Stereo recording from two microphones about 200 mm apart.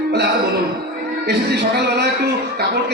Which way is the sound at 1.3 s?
55° right (ahead or behind).